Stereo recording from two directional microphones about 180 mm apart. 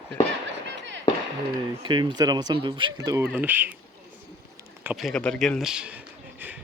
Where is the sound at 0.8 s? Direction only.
90° right.